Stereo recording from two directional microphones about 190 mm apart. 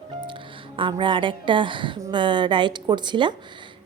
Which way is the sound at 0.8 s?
25° right (ahead or behind).